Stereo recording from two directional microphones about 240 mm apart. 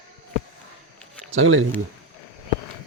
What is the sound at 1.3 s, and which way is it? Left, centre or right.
Speech, right.